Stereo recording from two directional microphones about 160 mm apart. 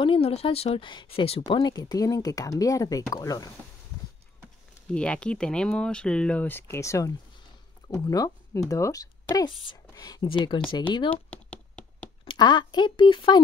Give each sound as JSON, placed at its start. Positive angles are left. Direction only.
{"t": 0.0, "sound": "speech", "side_deg": 35}
{"t": 1.5, "sound": "speech", "side_deg": 25}
{"t": 4.9, "sound": "speech", "side_deg": 5}
{"t": 11.1, "sound": "a sound", "side_deg": 10}
{"t": 12.3, "sound": "speech", "side_deg": 30}